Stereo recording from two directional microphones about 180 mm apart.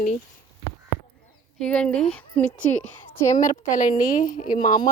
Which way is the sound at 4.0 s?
45° left (ahead or behind).